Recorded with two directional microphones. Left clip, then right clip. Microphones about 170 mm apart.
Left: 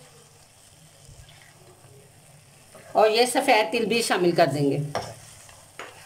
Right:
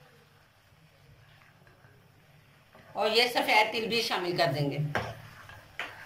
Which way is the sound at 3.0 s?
90° left.